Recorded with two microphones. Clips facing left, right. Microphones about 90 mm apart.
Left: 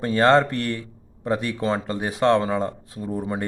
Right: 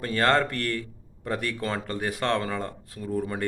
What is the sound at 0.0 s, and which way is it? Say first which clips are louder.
Speech: left 6 dB; 25° left (ahead or behind).